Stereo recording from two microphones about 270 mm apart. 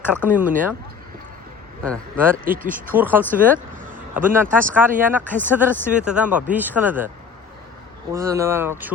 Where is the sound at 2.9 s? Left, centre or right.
Centre.